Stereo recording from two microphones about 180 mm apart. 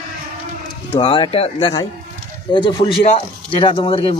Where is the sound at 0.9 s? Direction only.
30° left (ahead or behind).